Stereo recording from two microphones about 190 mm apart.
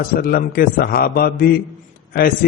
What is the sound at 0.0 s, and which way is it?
Speech, 50° left (ahead or behind).